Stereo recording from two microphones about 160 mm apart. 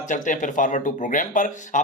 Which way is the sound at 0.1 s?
55° left (ahead or behind).